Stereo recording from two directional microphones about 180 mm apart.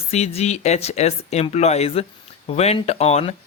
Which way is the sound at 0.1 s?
35° left (ahead or behind).